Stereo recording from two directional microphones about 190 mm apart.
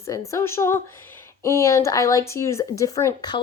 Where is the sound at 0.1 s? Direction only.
15° left (ahead or behind).